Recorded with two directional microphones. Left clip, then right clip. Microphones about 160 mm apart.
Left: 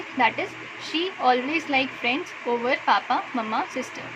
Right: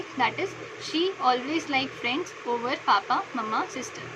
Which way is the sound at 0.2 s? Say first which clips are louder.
Left 4 dB; 55° left (ahead or behind).